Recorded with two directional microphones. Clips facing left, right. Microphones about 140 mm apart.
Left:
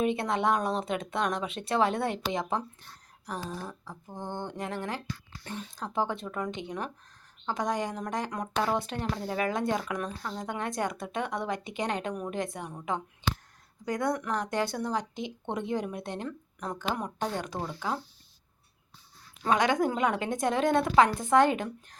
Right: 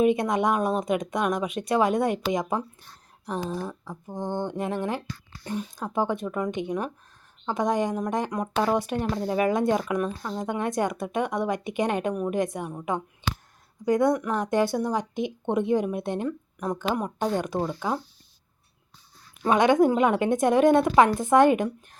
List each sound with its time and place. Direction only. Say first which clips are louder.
0.0 s speech: right 5 dB; 15° right (ahead or behind)
19.4 s speech: right 6 dB; 20° right (ahead or behind)